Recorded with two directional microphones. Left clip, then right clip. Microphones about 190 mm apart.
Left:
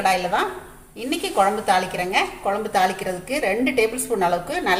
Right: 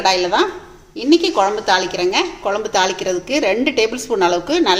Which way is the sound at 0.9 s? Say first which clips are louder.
Right 7 dB; 40° right (ahead or behind).